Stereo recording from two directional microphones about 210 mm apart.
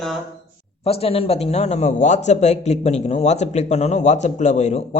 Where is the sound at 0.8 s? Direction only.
25° left (ahead or behind).